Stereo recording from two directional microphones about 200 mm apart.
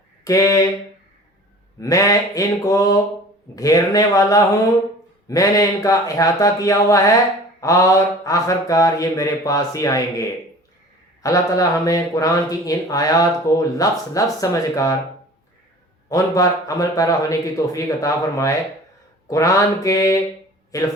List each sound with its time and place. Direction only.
0.3 s speech: 15° left (ahead or behind)
1.8 s speech: 15° left (ahead or behind)
16.0 s speech: 15° left (ahead or behind)